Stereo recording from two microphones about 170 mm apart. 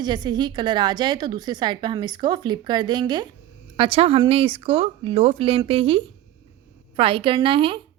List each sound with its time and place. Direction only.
0.0 s a woman's voice: 25° right (ahead or behind)